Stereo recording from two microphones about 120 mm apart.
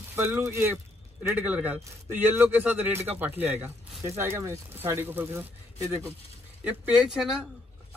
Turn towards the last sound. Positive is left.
turn(degrees=-5)  # may be behind; listen again after turning